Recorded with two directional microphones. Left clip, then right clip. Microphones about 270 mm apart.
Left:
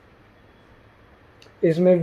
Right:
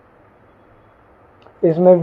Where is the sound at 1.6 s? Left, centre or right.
Left.